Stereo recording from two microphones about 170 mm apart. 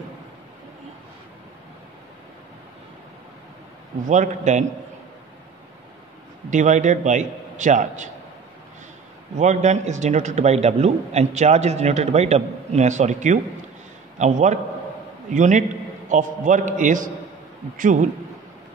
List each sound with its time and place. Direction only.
4.1 s a man's voice: 45° right (ahead or behind)
6.5 s a man's voice: 45° right (ahead or behind)
9.4 s a man's voice: 45° right (ahead or behind)